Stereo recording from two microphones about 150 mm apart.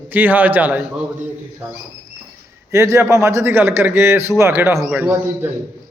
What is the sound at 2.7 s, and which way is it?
A man's voice, 20° right (ahead or behind).